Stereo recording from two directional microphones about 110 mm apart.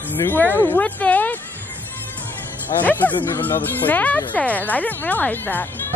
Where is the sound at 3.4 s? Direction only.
15° left (ahead or behind).